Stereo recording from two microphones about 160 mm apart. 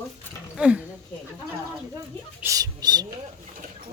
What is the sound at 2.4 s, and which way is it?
Speech, 25° right (ahead or behind).